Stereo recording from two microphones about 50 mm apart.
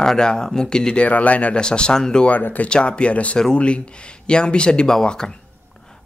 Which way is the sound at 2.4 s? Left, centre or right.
Left.